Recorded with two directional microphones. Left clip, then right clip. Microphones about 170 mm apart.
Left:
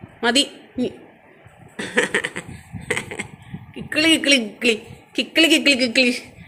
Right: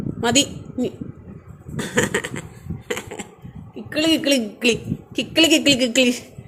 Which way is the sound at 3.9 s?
5° right (ahead or behind).